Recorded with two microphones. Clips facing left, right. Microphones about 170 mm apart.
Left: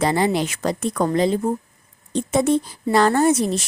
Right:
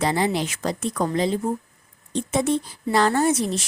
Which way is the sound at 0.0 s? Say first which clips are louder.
Left 3 dB; 50° left (ahead or behind).